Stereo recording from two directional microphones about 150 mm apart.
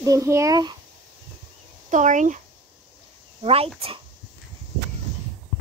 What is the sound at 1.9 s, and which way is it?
Speech, 55° right (ahead or behind).